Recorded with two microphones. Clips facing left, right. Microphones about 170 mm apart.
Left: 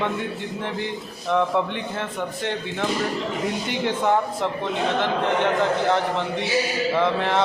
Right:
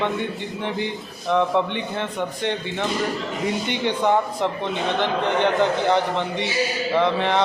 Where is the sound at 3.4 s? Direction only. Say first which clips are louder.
Right 4 dB; centre (ahead or behind).